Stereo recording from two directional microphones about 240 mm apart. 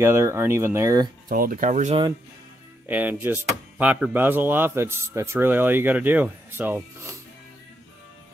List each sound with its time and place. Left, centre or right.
0.0 s speech: centre
1.3 s speech: right
2.9 s speech: centre